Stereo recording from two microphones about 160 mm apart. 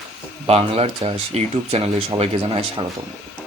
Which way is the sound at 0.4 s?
40° right (ahead or behind).